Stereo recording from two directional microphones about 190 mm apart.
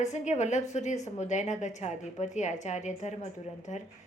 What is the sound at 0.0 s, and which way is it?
A woman's voice, 40° left (ahead or behind).